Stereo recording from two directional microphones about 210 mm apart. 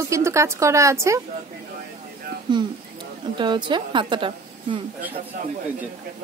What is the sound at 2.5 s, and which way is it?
A woman's voice, 20° right (ahead or behind).